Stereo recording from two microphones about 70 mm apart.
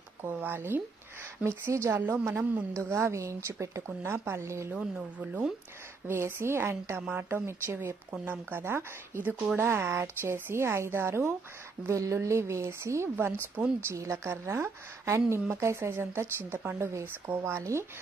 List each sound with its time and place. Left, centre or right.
0.2 s speech: right
1.4 s a woman's voice: right
4.7 s speech: centre
6.0 s a woman's voice: right
7.0 s a woman's voice: right